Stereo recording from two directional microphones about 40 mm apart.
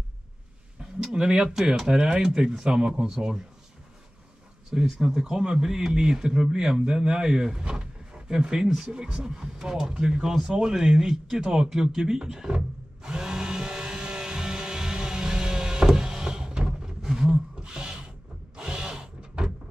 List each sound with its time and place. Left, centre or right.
0.7 s a man's voice: centre
4.6 s a man's voice: centre
11.3 s wood: centre
18.6 s drill: centre